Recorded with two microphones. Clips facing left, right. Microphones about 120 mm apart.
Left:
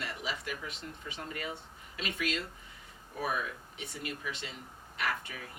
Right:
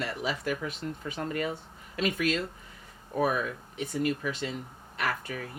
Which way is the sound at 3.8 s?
50° right (ahead or behind).